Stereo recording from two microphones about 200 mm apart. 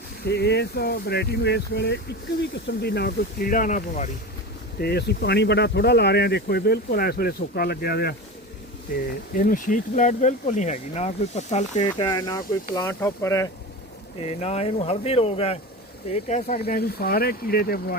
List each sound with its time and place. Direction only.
0.3 s speech: 55° left (ahead or behind); by 4.1 s 40° left (ahead or behind)
4.8 s speech: 55° left (ahead or behind)
9.3 s speech: 45° left (ahead or behind)
11.9 s speech: 20° left (ahead or behind)
14.3 s speech: 30° left (ahead or behind)
16.3 s speech: 45° left (ahead or behind)